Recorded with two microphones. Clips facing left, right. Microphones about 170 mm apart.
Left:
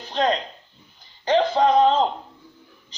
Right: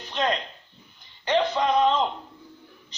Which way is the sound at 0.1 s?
35° left (ahead or behind).